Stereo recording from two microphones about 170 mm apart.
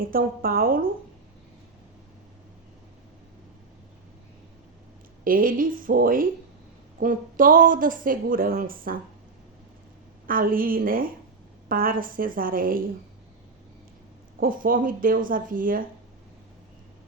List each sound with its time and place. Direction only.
0.0 s a woman's voice: 60° right (ahead or behind)
5.2 s a woman's voice: 55° right (ahead or behind)
10.2 s a woman's voice: 55° right (ahead or behind)
14.3 s a woman's voice: 55° right (ahead or behind)